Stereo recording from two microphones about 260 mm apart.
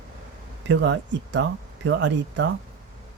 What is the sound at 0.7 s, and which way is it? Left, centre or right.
Speech, right.